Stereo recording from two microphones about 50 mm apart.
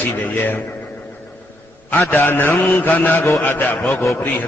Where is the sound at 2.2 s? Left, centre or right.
Left.